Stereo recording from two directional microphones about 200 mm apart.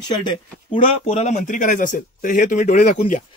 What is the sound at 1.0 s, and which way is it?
Speech, 35° left (ahead or behind).